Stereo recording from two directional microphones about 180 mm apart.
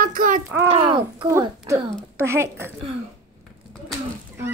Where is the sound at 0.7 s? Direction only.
30° right (ahead or behind).